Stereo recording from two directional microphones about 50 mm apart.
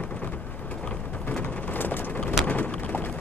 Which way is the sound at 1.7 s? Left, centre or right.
Left.